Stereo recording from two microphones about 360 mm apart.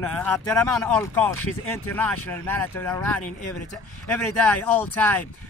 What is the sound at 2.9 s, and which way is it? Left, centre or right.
Speech, centre.